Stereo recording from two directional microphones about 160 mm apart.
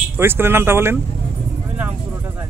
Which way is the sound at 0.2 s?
15° right (ahead or behind).